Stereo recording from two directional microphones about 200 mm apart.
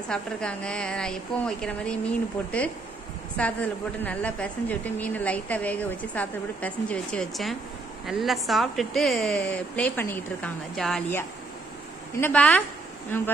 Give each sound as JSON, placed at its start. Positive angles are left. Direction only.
{"t": 0.1, "sound": "a woman's voice", "side_deg": 5}
{"t": 12.2, "sound": "a woman's voice", "side_deg": 5}